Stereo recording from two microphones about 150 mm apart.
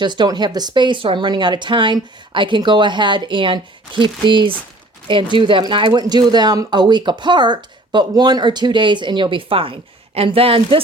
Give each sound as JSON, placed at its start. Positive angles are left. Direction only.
{"t": 0.0, "sound": "speech", "side_deg": -30}